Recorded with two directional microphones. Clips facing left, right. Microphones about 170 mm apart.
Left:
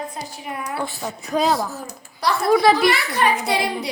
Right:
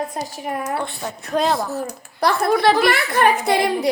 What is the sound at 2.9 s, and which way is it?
Speech, 55° right (ahead or behind).